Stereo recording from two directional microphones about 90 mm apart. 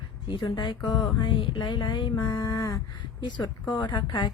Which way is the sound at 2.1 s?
45° left (ahead or behind).